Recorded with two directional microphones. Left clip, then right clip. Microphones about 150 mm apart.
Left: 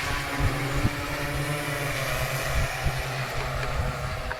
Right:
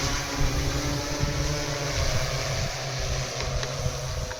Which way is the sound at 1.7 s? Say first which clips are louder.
Left 1 dB; 25° right (ahead or behind).